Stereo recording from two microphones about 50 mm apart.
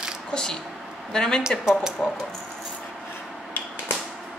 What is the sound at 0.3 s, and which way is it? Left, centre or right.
Speech, centre.